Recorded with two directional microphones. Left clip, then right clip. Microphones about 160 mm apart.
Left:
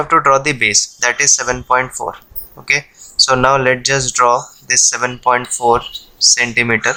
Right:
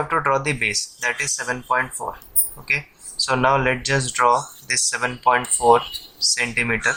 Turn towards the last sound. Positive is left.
turn(degrees=45)  # may be behind; listen again after turning